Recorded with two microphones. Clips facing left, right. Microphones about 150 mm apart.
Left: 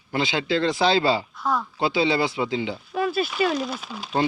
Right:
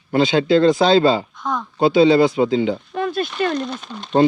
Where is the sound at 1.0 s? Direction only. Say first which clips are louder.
Right 6 dB; 50° right (ahead or behind).